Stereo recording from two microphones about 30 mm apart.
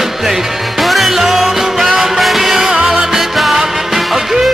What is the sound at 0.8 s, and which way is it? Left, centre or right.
Music, centre.